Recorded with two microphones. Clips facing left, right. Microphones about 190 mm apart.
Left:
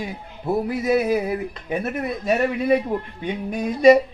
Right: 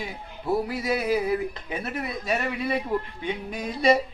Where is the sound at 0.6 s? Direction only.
55° left (ahead or behind).